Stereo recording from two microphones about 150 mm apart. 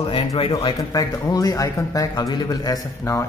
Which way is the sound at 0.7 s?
20° left (ahead or behind).